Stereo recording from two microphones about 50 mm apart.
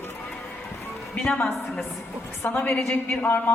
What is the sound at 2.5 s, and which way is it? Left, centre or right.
Speech, left.